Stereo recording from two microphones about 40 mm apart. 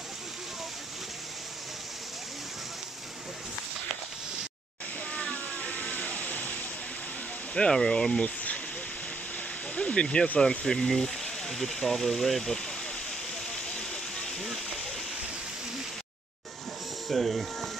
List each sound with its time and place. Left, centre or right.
5.1 s waterfall: left
7.5 s speech: left
9.8 s speech: left; by 12.5 s centre
13.7 s a sound: centre
14.4 s a sound: centre
17.1 s speech: centre